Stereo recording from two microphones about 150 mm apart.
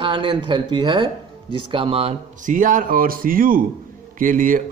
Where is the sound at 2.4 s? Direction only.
60° right (ahead or behind).